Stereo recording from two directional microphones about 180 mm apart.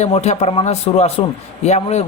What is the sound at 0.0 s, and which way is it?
Speech, 35° left (ahead or behind).